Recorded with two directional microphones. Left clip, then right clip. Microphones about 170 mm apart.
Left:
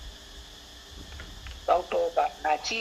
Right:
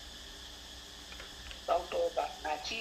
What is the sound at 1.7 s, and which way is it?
Music, 65° left (ahead or behind).